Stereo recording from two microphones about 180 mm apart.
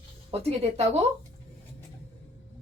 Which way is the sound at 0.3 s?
35° right (ahead or behind).